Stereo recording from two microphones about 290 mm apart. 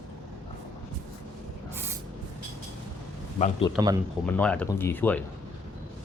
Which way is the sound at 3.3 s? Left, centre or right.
Left.